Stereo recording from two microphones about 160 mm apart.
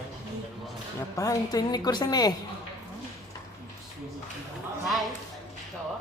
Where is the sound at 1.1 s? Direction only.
20° left (ahead or behind).